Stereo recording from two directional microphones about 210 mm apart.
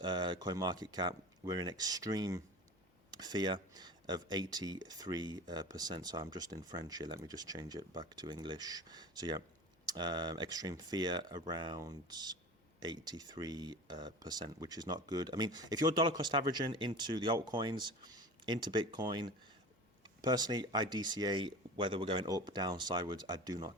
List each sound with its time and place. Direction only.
0.0 s speech: 20° right (ahead or behind)